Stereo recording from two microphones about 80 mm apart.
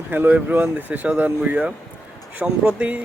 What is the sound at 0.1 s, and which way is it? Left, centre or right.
Speech, right.